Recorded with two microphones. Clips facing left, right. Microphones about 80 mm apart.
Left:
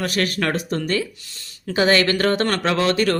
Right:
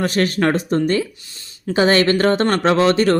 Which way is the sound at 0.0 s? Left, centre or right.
Right.